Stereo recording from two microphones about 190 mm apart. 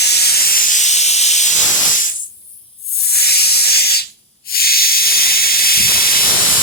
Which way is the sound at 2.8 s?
55° left (ahead or behind).